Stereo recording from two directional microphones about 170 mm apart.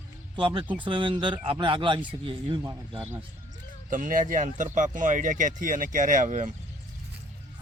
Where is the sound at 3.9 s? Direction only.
50° right (ahead or behind).